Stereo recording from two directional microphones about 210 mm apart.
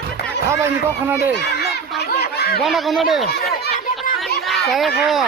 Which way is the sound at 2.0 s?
50° left (ahead or behind).